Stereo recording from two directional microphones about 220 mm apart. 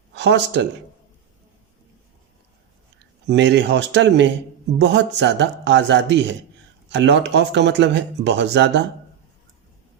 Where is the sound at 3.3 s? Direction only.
55° right (ahead or behind).